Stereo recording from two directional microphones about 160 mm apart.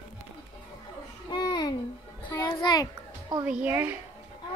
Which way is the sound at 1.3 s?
25° left (ahead or behind).